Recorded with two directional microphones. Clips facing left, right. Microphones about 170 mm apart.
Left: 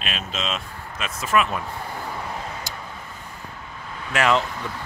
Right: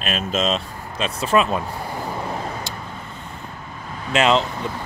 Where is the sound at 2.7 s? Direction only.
30° right (ahead or behind).